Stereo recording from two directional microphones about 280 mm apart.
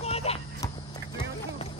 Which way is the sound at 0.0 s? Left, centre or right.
Left.